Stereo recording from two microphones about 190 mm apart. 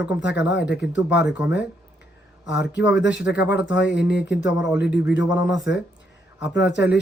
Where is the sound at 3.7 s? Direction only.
70° left (ahead or behind).